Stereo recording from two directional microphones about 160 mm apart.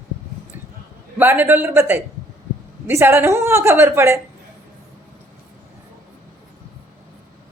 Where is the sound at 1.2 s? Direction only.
10° right (ahead or behind).